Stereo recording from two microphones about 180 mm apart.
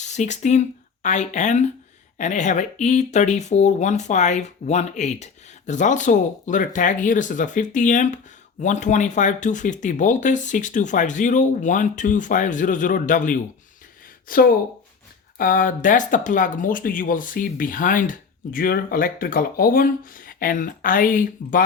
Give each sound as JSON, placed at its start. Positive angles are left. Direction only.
{"t": 0.0, "sound": "speech", "side_deg": 40}